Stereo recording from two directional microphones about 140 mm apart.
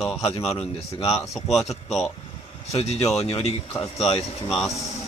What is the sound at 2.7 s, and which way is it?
Speech, 50° left (ahead or behind).